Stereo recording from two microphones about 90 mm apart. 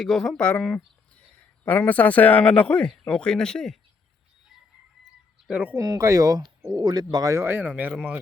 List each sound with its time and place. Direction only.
0.0 s speech: centre (ahead or behind)
1.6 s speech: 20° left (ahead or behind)
5.5 s speech: 15° right (ahead or behind)
5.7 s speech: 35° right (ahead or behind)
7.4 s speech: 20° right (ahead or behind)